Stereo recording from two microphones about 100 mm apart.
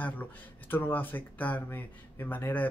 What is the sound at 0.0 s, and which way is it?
Speech, 20° left (ahead or behind).